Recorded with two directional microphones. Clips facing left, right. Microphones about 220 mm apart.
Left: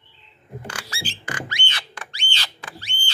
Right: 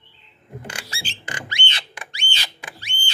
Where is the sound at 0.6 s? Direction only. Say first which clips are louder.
Left 2 dB; 25° right (ahead or behind).